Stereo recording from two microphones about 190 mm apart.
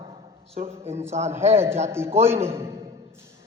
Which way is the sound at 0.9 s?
15° right (ahead or behind).